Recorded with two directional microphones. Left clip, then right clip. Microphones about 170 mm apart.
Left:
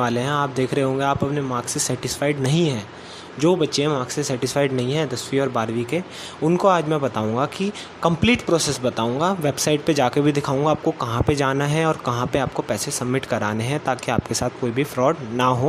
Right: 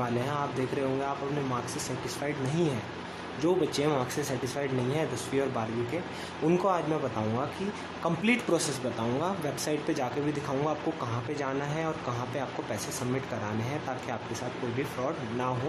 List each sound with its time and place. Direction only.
0.0 s speech: 40° left (ahead or behind)
8.0 s speech: 30° left (ahead or behind); by 15.5 s 45° left (ahead or behind)